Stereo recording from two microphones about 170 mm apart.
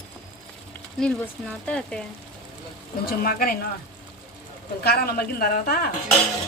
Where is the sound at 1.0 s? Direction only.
5° left (ahead or behind).